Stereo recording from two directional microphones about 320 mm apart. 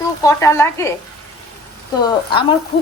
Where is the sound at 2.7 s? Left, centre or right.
Centre.